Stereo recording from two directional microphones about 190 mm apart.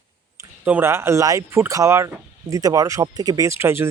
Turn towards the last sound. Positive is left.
turn(degrees=-15)  # may be behind; listen again after turning